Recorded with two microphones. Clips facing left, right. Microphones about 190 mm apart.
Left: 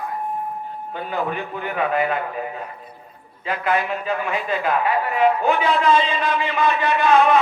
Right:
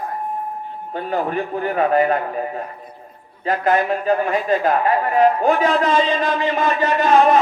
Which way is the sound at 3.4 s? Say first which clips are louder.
Right 4 dB; 40° right (ahead or behind).